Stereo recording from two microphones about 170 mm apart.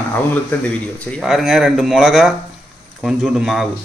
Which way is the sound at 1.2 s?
Centre (ahead or behind).